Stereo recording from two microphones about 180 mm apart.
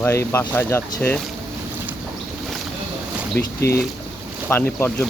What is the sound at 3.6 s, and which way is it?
Speech, 15° left (ahead or behind).